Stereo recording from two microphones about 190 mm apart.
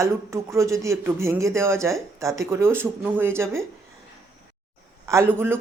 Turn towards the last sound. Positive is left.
turn(degrees=-10)  # may be behind; listen again after turning